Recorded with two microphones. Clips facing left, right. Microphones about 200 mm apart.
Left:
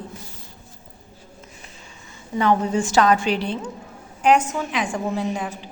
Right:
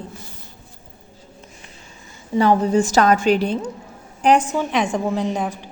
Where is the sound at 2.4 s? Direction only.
35° right (ahead or behind).